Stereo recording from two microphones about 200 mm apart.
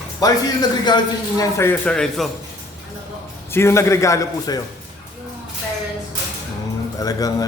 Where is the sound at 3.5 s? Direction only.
15° left (ahead or behind).